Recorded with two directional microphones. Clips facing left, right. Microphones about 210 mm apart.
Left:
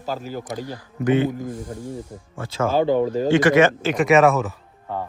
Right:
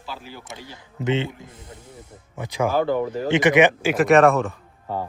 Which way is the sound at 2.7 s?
20° left (ahead or behind).